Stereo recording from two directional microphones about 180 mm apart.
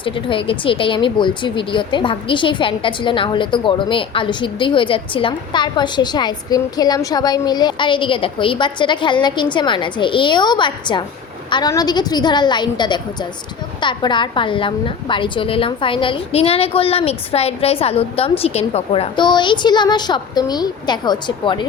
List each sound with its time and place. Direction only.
0.0 s speech: 30° left (ahead or behind)